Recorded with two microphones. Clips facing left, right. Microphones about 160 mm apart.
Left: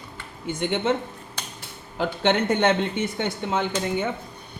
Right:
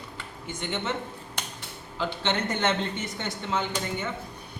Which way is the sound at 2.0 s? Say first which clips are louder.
Left 6 dB; 55° left (ahead or behind).